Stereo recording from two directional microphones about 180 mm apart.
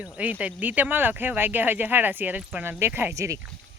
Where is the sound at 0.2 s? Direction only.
10° right (ahead or behind).